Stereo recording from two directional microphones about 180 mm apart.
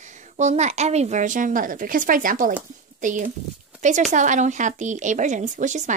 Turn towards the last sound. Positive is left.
turn(degrees=-45)  # may be behind; listen again after turning